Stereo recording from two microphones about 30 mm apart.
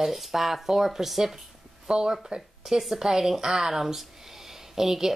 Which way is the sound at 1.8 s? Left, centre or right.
Right.